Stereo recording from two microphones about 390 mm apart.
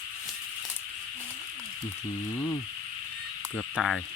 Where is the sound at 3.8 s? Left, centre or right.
Centre.